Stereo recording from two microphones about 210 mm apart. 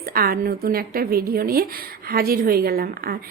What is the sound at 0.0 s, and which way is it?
A woman's voice, 45° right (ahead or behind).